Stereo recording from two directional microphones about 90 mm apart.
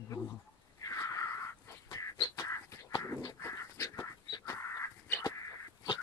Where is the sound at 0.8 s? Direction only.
40° left (ahead or behind).